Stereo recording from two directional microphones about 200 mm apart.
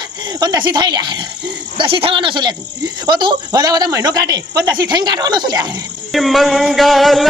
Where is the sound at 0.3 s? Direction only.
20° right (ahead or behind).